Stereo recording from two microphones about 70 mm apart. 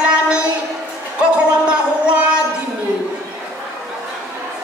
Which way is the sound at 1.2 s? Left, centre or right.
Centre.